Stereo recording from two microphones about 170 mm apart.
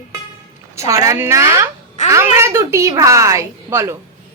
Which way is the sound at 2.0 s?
45° left (ahead or behind).